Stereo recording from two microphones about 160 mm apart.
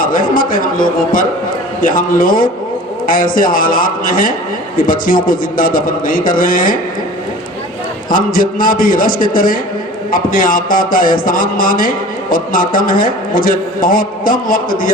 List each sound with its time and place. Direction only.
0.0 s a man's voice: 60° left (ahead or behind)
8.1 s a man's voice: 60° left (ahead or behind)